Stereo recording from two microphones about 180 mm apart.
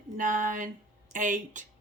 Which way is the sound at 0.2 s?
45° right (ahead or behind).